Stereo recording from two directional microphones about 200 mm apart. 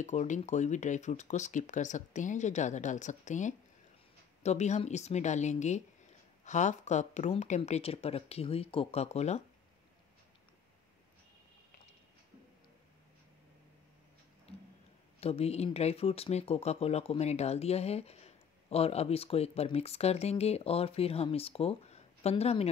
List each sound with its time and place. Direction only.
0.0 s speech: 35° left (ahead or behind)
15.1 s speech: 30° left (ahead or behind)